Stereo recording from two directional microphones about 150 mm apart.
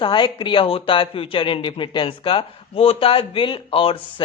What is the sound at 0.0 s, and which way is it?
Speech, 30° left (ahead or behind).